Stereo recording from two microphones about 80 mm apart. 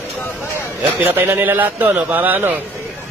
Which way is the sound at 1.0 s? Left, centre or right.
Right.